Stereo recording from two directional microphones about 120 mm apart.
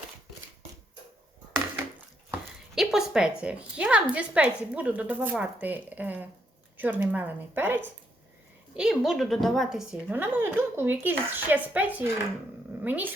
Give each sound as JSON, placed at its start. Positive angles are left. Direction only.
{"t": 2.7, "sound": "a woman's voice", "side_deg": -5}
{"t": 8.7, "sound": "a woman's voice", "side_deg": -5}
{"t": 10.1, "sound": "a woman's voice", "side_deg": -15}